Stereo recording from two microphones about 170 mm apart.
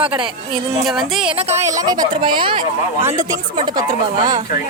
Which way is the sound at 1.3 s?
35° right (ahead or behind).